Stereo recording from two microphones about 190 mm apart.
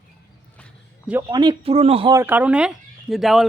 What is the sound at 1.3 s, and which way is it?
Speech, 25° right (ahead or behind).